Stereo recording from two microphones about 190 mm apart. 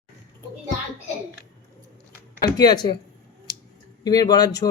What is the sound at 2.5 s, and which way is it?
Speech, 20° left (ahead or behind).